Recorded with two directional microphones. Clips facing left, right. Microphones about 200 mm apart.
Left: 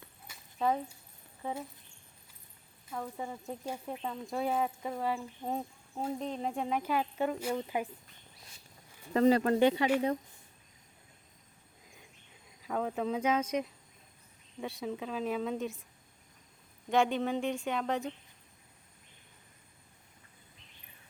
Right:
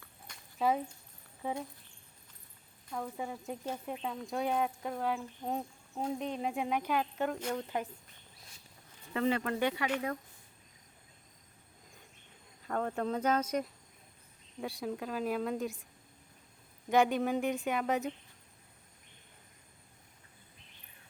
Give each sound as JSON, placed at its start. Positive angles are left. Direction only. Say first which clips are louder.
{"t": 0.3, "sound": "a sound", "louder": "even", "side_deg": 5}
{"t": 1.4, "sound": "speech", "louder": "right 1 dB", "side_deg": -10}
{"t": 2.8, "sound": "speech", "louder": "even", "side_deg": 0}
{"t": 9.1, "sound": "speech", "louder": "left 6 dB", "side_deg": 35}
{"t": 12.6, "sound": "speech", "louder": "left 1 dB", "side_deg": 5}
{"t": 14.6, "sound": "speech", "louder": "even", "side_deg": 0}
{"t": 16.9, "sound": "speech", "louder": "right 1 dB", "side_deg": -5}